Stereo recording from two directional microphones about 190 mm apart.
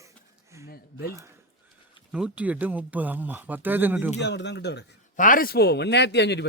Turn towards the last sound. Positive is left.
turn(degrees=65)  # may be behind; listen again after turning